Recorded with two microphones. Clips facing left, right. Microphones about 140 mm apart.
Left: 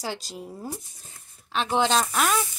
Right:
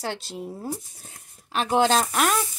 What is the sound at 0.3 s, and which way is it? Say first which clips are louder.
Speech: right 3 dB; centre (ahead or behind).